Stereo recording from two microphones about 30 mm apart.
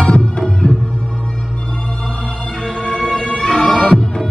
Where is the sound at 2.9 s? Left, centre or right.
Left.